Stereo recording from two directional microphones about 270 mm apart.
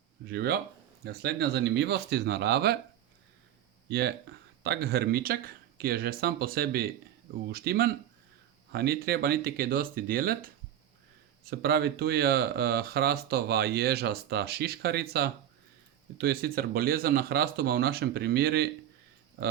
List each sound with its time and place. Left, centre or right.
0.3 s speech: right
3.8 s speech: right
11.5 s speech: right